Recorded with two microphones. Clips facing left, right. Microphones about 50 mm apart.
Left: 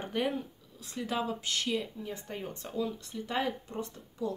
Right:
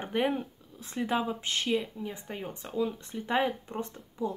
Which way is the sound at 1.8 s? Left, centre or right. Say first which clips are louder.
Right 2 dB; centre.